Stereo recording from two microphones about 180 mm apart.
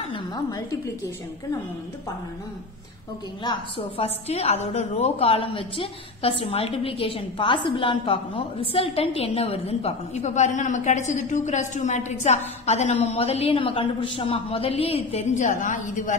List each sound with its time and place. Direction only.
0.1 s a woman's voice: 20° left (ahead or behind)
3.4 s a woman's voice: 30° left (ahead or behind); by 16.2 s 45° left (ahead or behind)